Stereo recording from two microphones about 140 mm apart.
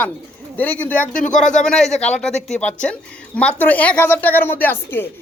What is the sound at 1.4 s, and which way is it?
Speech, 5° left (ahead or behind).